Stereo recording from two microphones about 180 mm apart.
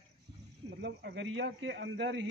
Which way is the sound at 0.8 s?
70° right (ahead or behind).